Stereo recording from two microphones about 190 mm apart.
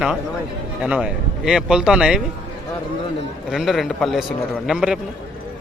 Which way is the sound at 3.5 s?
Centre (ahead or behind).